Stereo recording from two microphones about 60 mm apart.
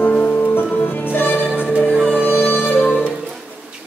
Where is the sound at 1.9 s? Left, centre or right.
Centre.